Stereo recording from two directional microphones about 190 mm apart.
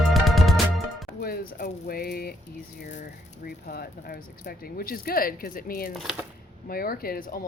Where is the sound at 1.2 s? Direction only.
55° left (ahead or behind).